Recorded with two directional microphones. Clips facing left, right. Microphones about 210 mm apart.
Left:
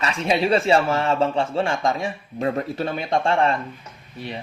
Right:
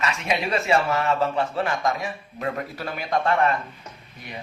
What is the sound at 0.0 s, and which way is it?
Speech, 30° left (ahead or behind).